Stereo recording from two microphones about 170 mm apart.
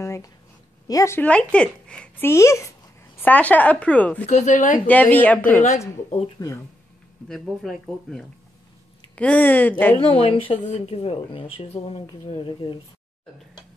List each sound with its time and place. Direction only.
0.0 s a sound: 15° left (ahead or behind)
0.8 s speech: 20° left (ahead or behind)
4.3 s speech: 45° left (ahead or behind)
4.8 s speech: 10° left (ahead or behind)
6.0 s speech: 40° left (ahead or behind)
7.2 s speech: centre (ahead or behind)
9.9 s speech: 35° left (ahead or behind)